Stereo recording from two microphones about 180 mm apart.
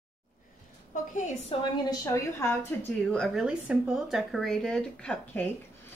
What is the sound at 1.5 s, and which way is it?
Speech, 30° left (ahead or behind).